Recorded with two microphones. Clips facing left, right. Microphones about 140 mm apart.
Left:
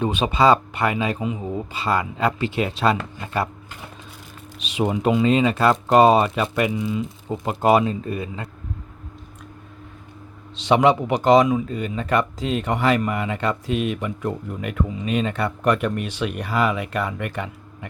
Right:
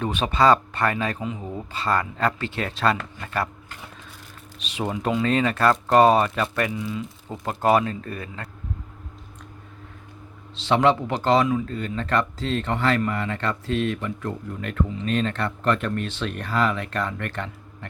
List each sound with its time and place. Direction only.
0.0 s speech: 15° left (ahead or behind)
10.5 s speech: 15° left (ahead or behind)